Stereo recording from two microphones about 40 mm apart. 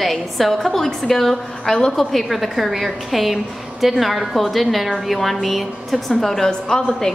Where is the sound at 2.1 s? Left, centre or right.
Centre.